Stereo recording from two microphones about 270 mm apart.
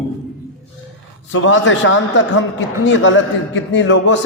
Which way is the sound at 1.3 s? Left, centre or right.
Left.